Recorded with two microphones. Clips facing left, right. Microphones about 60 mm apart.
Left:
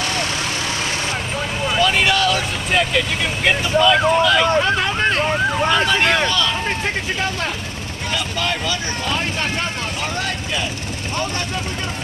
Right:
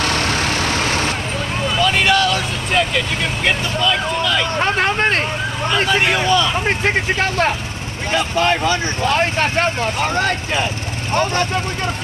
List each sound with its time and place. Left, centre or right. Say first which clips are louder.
0.0 s vehicle: right 4 dB; right
1.7 s vehicle: right 1 dB; centre
3.4 s speech: left 4 dB; centre
4.7 s speech: right 2 dB; right
5.9 s speech: right 1 dB; centre
8.1 s speech: right 6 dB; right